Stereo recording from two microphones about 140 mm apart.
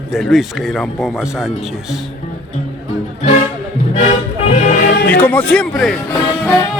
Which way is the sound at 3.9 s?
55° left (ahead or behind).